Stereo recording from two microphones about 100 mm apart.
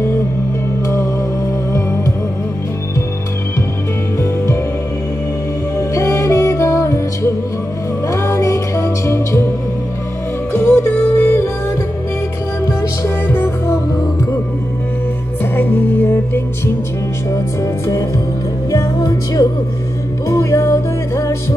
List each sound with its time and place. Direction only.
5.8 s music: 30° left (ahead or behind)
8.1 s music: 30° left (ahead or behind)
10.5 s music: 20° left (ahead or behind)
12.6 s music: 25° left (ahead or behind)
15.5 s music: 20° left (ahead or behind)